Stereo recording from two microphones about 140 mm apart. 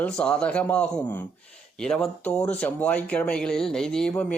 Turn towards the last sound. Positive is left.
turn(degrees=5)  # may be behind; listen again after turning